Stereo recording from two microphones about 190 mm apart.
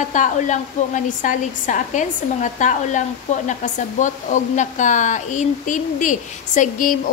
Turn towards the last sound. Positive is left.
turn(degrees=40)  # may be behind; listen again after turning